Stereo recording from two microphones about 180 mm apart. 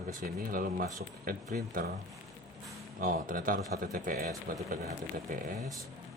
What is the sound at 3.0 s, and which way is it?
Speech, 55° right (ahead or behind).